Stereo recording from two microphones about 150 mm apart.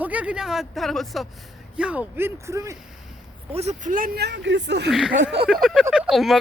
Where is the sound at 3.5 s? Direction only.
45° right (ahead or behind).